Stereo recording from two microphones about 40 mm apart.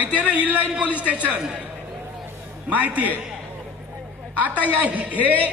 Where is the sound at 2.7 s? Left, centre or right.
Right.